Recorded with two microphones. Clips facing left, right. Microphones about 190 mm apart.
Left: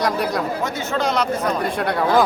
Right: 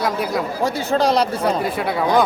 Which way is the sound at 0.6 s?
35° right (ahead or behind).